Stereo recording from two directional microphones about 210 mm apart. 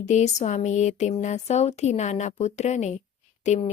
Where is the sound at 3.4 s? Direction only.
35° left (ahead or behind).